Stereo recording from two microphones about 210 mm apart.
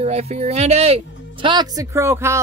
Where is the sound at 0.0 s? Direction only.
30° right (ahead or behind).